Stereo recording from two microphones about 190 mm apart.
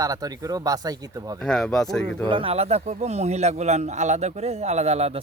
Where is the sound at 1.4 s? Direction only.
5° left (ahead or behind).